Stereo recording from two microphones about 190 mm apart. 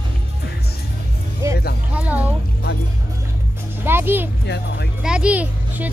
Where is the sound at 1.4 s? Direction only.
15° right (ahead or behind).